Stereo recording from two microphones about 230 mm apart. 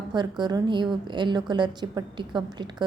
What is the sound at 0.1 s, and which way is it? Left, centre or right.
A woman's voice, centre.